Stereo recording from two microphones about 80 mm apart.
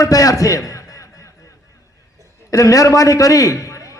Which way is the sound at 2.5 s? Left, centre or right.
Left.